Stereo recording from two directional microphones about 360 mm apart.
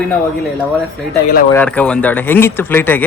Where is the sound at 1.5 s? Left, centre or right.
Centre.